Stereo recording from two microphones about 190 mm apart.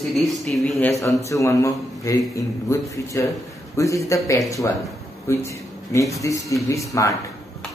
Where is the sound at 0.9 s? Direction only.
15° left (ahead or behind).